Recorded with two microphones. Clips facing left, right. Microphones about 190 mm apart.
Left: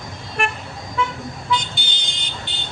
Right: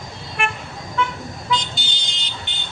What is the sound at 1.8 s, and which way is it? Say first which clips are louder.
Vehicle: even; 55° left (ahead or behind).